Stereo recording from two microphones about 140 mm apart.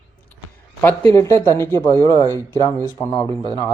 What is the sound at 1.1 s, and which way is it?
Speech, 20° left (ahead or behind).